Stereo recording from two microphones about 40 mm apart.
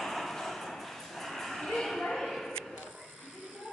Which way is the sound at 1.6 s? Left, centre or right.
Centre.